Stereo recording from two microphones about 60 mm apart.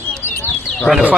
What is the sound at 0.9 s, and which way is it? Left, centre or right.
Speech, centre.